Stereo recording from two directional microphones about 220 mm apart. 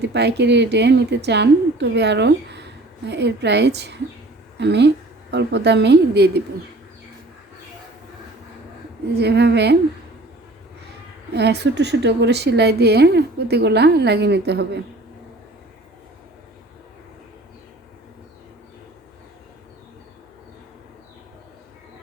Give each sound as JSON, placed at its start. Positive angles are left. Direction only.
{"t": 0.0, "sound": "a woman's voice", "side_deg": -50}
{"t": 9.1, "sound": "a woman's voice", "side_deg": -50}
{"t": 11.3, "sound": "a woman's voice", "side_deg": -50}